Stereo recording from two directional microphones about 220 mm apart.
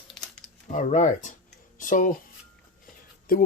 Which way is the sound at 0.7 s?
35° left (ahead or behind).